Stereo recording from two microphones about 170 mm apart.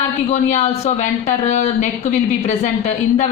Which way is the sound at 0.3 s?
40° left (ahead or behind).